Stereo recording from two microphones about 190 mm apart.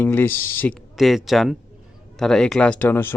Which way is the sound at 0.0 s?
10° left (ahead or behind).